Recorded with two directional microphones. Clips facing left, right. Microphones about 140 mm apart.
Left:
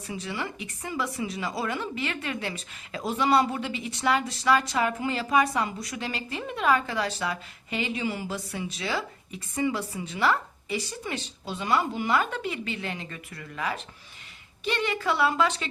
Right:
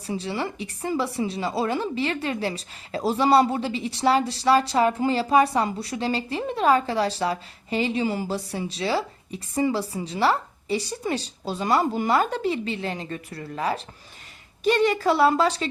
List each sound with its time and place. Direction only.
0.1 s a woman's voice: 30° right (ahead or behind)